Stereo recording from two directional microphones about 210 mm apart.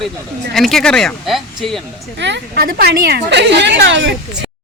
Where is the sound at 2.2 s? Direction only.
55° right (ahead or behind).